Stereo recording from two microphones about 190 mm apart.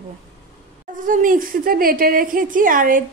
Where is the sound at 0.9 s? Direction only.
45° right (ahead or behind).